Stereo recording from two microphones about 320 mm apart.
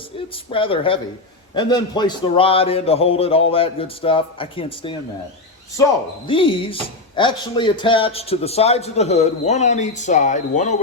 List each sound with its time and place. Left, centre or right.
0.5 s a man's voice: centre